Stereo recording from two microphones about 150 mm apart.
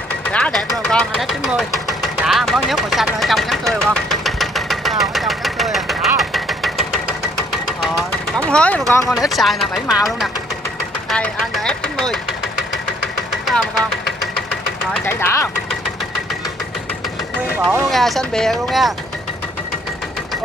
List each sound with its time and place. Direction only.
0.3 s vehicle: 5° left (ahead or behind)
8.4 s speech: 10° left (ahead or behind)
13.5 s engine knocking: centre (ahead or behind)
15.0 s speech: 15° left (ahead or behind)
17.9 s speech: centre (ahead or behind)